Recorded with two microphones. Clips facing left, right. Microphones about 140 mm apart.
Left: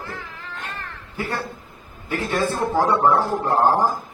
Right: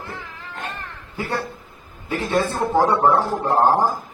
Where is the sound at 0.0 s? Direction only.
20° right (ahead or behind).